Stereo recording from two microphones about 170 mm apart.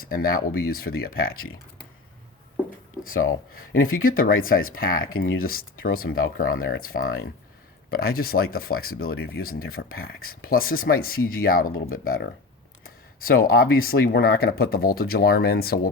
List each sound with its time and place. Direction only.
0.0 s speech: 60° left (ahead or behind)
3.5 s speech: 55° left (ahead or behind)